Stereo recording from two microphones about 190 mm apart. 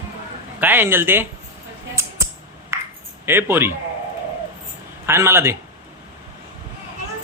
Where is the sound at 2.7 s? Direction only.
15° right (ahead or behind).